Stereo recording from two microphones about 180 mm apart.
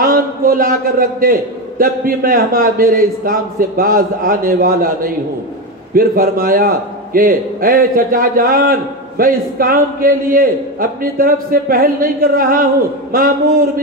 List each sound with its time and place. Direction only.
0.0 s a man's voice: 50° right (ahead or behind)